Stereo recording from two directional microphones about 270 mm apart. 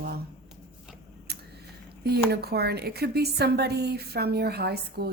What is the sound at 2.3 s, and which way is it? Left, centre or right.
A woman's voice, right.